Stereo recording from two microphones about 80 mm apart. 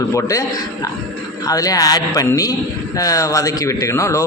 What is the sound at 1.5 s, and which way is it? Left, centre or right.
A man's voice, left.